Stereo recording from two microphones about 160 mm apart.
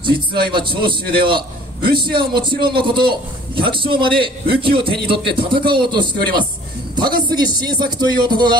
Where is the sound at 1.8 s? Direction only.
75° right (ahead or behind).